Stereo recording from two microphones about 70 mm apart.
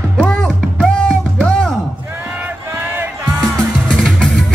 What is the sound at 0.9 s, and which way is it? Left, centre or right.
Music, centre.